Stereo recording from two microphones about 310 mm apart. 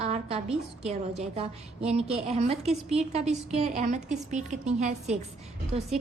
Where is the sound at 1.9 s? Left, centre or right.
Right.